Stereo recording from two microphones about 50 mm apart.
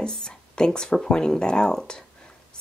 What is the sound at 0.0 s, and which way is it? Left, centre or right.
Speech, centre.